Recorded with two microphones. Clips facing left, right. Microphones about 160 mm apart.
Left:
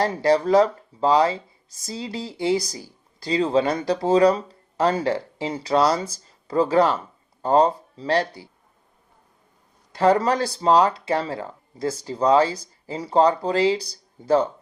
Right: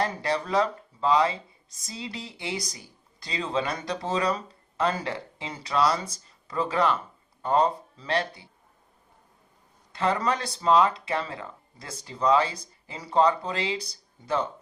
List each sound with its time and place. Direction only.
0.0 s speech: 35° left (ahead or behind)
9.9 s speech: 35° left (ahead or behind)